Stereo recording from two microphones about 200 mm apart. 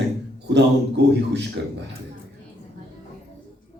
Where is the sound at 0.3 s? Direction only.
60° right (ahead or behind).